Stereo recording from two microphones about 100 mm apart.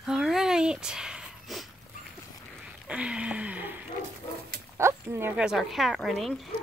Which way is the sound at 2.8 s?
10° right (ahead or behind).